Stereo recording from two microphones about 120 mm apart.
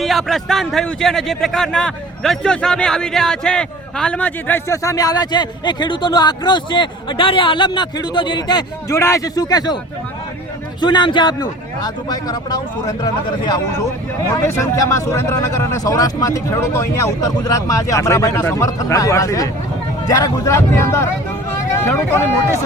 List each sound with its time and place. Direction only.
0.0 s a man's voice: centre (ahead or behind); by 9.0 s 35° left (ahead or behind)
9.0 s speech: 25° left (ahead or behind)
10.8 s speech: 40° left (ahead or behind)
14.4 s speech: 20° left (ahead or behind)
21.5 s a sound: 20° left (ahead or behind)